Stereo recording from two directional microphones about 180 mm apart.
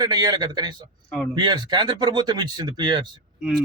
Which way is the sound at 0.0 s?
20° right (ahead or behind).